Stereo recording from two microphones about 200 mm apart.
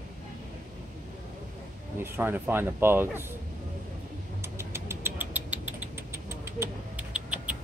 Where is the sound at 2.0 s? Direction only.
10° right (ahead or behind).